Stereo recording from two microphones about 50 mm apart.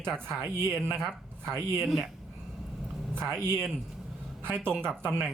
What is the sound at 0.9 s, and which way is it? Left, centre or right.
Speech, centre.